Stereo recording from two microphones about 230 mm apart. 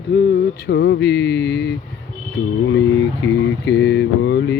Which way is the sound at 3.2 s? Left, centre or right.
Left.